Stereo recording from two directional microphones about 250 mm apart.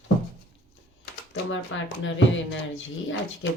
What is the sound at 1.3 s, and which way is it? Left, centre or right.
Speech, left.